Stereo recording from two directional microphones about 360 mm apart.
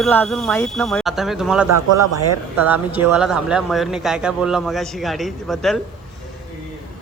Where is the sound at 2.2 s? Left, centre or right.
Right.